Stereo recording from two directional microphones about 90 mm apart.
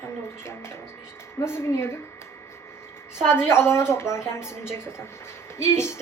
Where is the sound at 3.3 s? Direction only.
30° left (ahead or behind).